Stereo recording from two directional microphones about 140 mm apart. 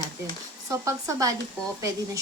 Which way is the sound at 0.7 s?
25° right (ahead or behind).